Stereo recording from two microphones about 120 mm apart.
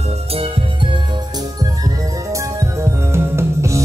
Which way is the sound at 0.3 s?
50° right (ahead or behind).